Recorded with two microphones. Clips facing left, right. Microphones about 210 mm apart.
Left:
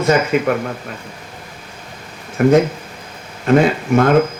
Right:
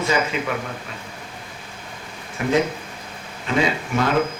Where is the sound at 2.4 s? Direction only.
50° left (ahead or behind).